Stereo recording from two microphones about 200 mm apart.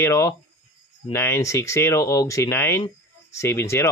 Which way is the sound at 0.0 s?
15° left (ahead or behind).